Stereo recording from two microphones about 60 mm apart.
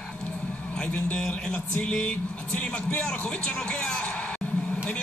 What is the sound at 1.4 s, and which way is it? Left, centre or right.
Speech, centre.